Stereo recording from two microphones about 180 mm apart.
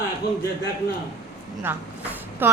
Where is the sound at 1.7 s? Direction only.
10° right (ahead or behind).